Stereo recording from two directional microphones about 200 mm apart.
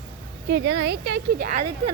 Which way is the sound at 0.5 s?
65° right (ahead or behind).